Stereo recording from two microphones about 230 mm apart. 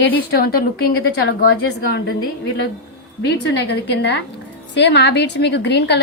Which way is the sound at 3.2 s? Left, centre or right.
Left.